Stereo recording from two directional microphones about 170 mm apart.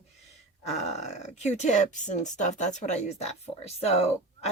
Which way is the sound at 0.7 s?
40° left (ahead or behind).